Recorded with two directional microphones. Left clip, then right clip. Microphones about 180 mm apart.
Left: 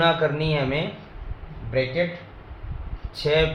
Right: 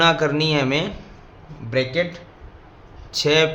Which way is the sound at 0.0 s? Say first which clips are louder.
Right 3 dB; 45° right (ahead or behind).